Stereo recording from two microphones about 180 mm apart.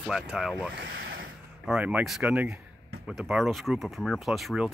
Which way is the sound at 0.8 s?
90° right.